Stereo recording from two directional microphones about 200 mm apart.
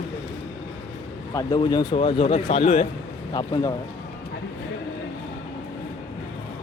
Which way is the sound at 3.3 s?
20° left (ahead or behind).